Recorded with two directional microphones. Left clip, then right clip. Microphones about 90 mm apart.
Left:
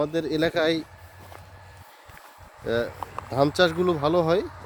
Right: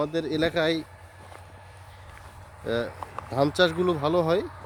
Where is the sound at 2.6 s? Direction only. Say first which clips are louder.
Left 2 dB; 20° left (ahead or behind).